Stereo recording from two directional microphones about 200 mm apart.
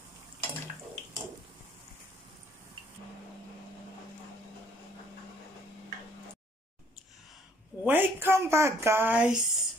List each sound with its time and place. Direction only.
7.8 s speech: 10° right (ahead or behind)